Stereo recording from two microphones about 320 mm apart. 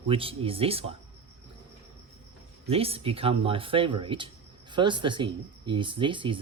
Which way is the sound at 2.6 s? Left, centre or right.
Centre.